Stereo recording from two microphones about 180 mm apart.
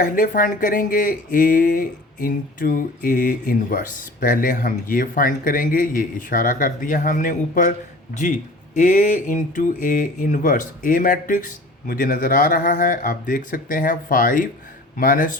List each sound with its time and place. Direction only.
0.0 s speech: 45° left (ahead or behind)
8.7 s speech: 45° left (ahead or behind)